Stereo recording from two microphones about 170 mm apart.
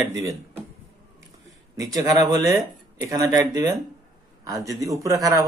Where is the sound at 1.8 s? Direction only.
20° right (ahead or behind).